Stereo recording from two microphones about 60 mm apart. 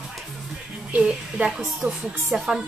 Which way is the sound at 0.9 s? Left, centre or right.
Centre.